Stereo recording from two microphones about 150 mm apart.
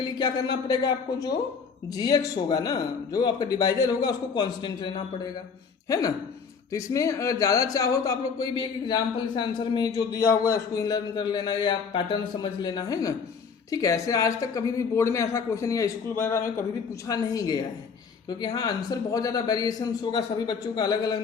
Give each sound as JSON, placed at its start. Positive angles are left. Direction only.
{"t": 0.0, "sound": "speech", "side_deg": 25}